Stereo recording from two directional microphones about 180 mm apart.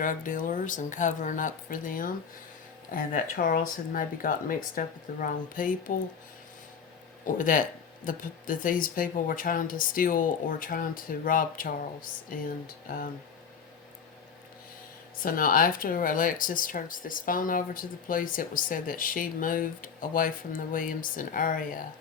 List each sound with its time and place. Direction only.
0.0 s speech: 45° left (ahead or behind)
7.3 s speech: 50° left (ahead or behind)
15.2 s speech: 50° left (ahead or behind)